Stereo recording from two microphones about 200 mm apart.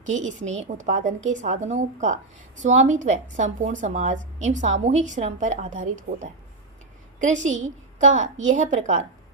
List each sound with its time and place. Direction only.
0.0 s a woman's voice: 35° right (ahead or behind)